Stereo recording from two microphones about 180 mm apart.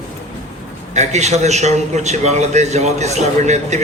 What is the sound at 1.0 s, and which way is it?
A man's voice, 40° right (ahead or behind).